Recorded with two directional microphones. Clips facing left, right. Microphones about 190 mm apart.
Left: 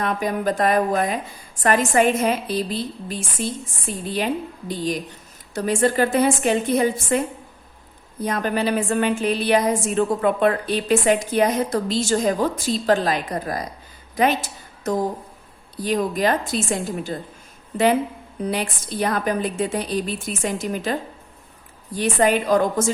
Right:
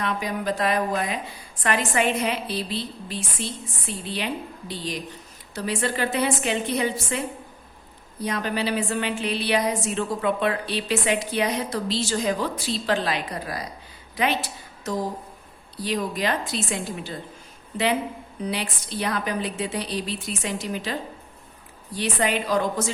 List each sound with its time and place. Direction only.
0.0 s a woman's voice: 50° left (ahead or behind)
8.2 s a woman's voice: 50° left (ahead or behind)
18.4 s a woman's voice: 45° left (ahead or behind)